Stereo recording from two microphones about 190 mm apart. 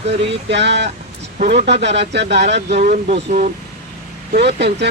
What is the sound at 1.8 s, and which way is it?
Speech, 65° right (ahead or behind).